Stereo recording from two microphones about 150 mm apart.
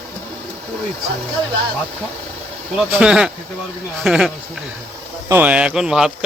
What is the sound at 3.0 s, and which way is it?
Speech, 5° right (ahead or behind).